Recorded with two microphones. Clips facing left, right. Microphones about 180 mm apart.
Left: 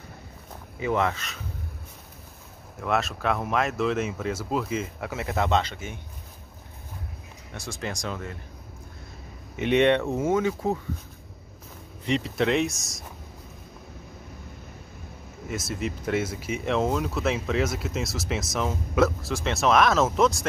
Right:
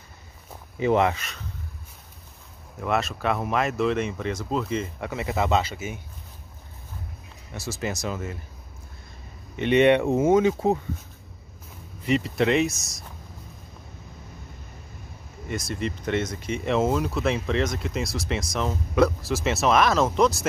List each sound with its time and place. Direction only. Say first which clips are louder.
0.7 s speech: right 4 dB; 25° right (ahead or behind)
2.8 s speech: right 1 dB; centre (ahead or behind)
7.5 s speech: right 3 dB; 5° right (ahead or behind)
9.6 s speech: right 2 dB; centre (ahead or behind)
9.8 s speech: right 4 dB; 15° right (ahead or behind)
12.1 s speech: right 2 dB; centre (ahead or behind)
15.4 s speech: right 1 dB; 5° left (ahead or behind)